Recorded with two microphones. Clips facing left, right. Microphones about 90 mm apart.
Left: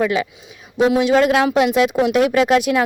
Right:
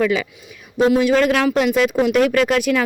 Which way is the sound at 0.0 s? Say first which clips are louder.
Even; 10° left (ahead or behind).